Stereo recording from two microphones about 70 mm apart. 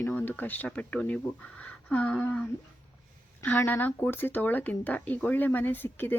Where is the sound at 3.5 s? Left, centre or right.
Left.